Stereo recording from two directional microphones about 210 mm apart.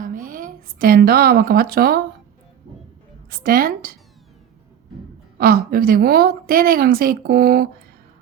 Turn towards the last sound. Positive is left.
turn(degrees=-45)  # may be behind; listen again after turning